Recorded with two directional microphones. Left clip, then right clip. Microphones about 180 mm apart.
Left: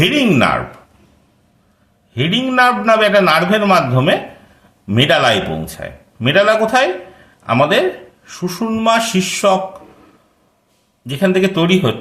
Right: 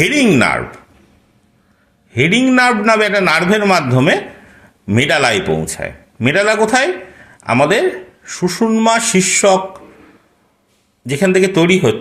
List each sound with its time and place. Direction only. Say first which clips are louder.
0.0 s speech: right 1 dB; 20° right (ahead or behind)
2.1 s speech: right 2 dB; 20° right (ahead or behind)
11.0 s speech: right 2 dB; 20° right (ahead or behind)